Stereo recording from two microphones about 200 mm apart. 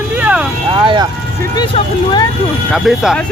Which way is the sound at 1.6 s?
20° left (ahead or behind).